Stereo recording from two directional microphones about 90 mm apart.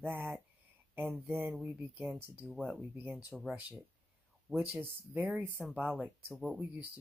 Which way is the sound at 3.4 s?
15° right (ahead or behind).